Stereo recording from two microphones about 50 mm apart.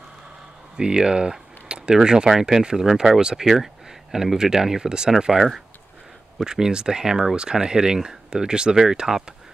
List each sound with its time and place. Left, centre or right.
0.7 s speech: centre
6.4 s speech: centre